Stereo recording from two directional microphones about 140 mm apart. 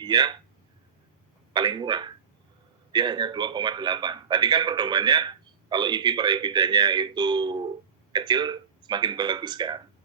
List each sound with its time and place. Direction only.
0.0 s speech: 30° right (ahead or behind)
1.5 s a man's voice: 35° right (ahead or behind)